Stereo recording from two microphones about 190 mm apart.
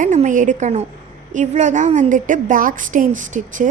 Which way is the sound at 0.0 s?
40° right (ahead or behind).